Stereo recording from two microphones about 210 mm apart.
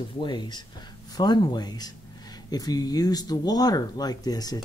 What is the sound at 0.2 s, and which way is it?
Speech, 20° left (ahead or behind).